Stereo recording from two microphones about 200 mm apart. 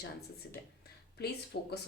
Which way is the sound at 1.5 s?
55° left (ahead or behind).